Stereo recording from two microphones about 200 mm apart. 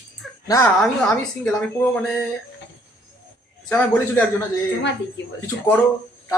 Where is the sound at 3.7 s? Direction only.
10° left (ahead or behind).